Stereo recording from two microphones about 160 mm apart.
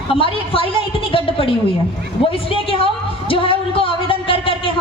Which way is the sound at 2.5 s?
35° left (ahead or behind).